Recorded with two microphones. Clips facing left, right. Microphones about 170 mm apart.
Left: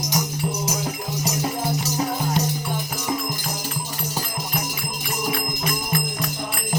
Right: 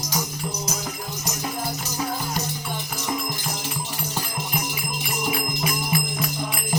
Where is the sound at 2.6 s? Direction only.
10° left (ahead or behind).